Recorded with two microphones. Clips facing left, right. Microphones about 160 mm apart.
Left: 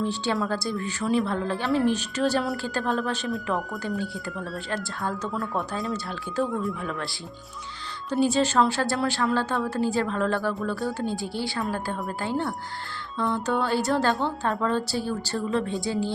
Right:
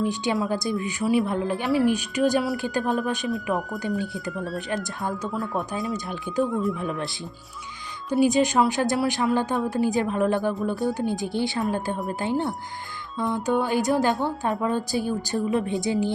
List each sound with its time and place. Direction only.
0.0 s speech: 15° right (ahead or behind)
5.3 s speech: centre (ahead or behind)
5.9 s speech: 15° right (ahead or behind)
6.4 s speech: centre (ahead or behind)
6.7 s speech: 20° right (ahead or behind)
8.1 s speech: 15° right (ahead or behind)